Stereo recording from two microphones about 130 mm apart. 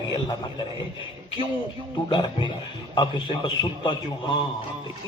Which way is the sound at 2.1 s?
35° left (ahead or behind).